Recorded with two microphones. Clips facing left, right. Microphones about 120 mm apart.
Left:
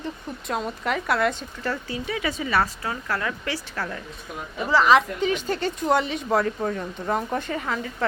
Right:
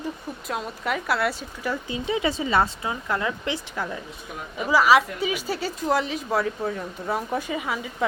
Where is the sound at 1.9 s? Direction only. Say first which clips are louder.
Right 3 dB; 20° right (ahead or behind).